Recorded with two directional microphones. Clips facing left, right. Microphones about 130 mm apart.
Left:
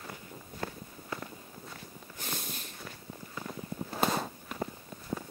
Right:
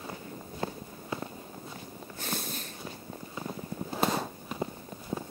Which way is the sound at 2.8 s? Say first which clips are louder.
Right 4 dB; 20° right (ahead or behind).